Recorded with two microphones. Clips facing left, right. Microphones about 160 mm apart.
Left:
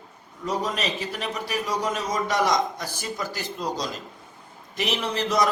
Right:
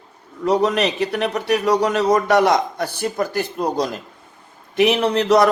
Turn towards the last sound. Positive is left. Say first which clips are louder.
# right 9 dB
turn(degrees=-60)  # may be behind; listen again after turning